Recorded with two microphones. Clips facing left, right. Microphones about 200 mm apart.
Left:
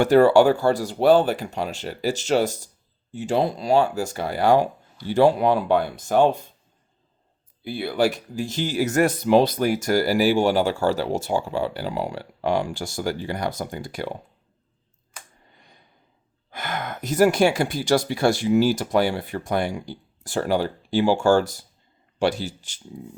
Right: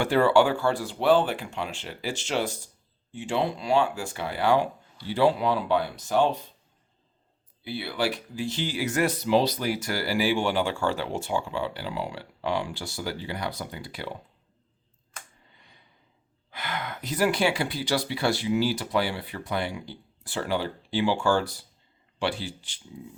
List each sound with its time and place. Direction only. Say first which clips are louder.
0.0 s speech: left 6 dB; 40° left (ahead or behind)
7.6 s speech: left 7 dB; 45° left (ahead or behind)
15.5 s a sound: left 6 dB; 45° left (ahead or behind)
16.5 s speech: left 4 dB; 45° left (ahead or behind)